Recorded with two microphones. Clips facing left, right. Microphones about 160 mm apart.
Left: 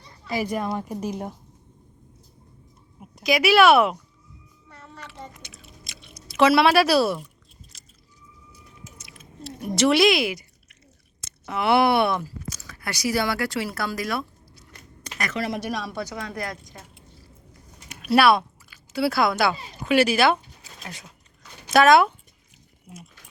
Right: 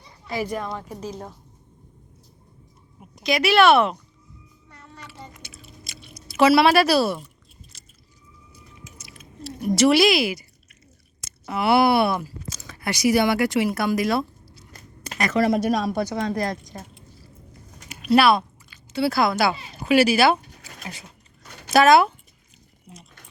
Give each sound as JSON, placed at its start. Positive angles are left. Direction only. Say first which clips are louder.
{"t": 0.3, "sound": "a woman's voice", "louder": "left 1 dB", "side_deg": 10}
{"t": 3.0, "sound": "a woman's voice", "louder": "left 1 dB", "side_deg": 0}
{"t": 4.9, "sound": "chewing", "louder": "left 1 dB", "side_deg": 0}
{"t": 9.0, "sound": "a sound", "louder": "right 3 dB", "side_deg": 0}
{"t": 11.2, "sound": "speech", "louder": "right 1 dB", "side_deg": -5}
{"t": 12.5, "sound": "speech", "louder": "right 4 dB", "side_deg": -25}
{"t": 15.3, "sound": "a woman's voice", "louder": "right 9 dB", "side_deg": -40}
{"t": 17.8, "sound": "speech", "louder": "right 1 dB", "side_deg": 0}